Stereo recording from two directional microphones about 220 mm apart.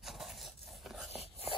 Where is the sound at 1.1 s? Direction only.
25° left (ahead or behind).